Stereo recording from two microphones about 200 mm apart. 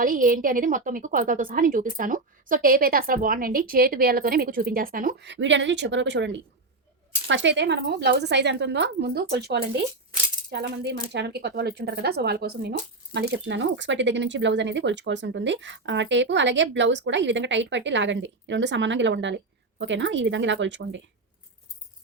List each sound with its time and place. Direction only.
0.0 s a woman's voice: 45° right (ahead or behind)
5.3 s speech: 65° right (ahead or behind)